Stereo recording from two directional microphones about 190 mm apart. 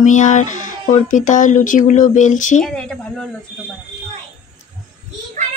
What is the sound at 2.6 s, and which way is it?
Speech, 5° left (ahead or behind).